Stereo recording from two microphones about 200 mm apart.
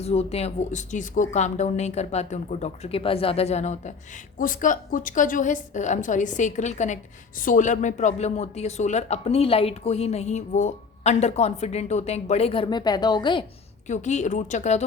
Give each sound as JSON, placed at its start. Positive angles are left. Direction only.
{"t": 0.0, "sound": "a woman's voice", "side_deg": 30}
{"t": 13.8, "sound": "a woman's voice", "side_deg": 35}